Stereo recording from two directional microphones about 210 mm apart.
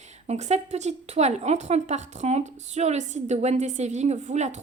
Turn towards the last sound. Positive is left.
turn(degrees=-35)  # may be behind; listen again after turning